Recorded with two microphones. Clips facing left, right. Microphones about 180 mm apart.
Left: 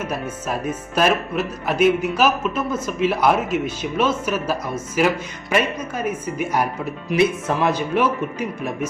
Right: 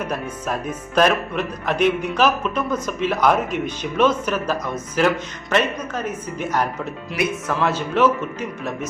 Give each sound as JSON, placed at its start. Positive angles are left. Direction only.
{"t": 0.0, "sound": "speech", "side_deg": 5}
{"t": 7.1, "sound": "speech", "side_deg": 25}
{"t": 7.5, "sound": "speech", "side_deg": 15}